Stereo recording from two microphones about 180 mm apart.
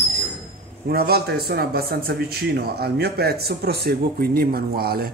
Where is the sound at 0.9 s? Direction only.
60° right (ahead or behind).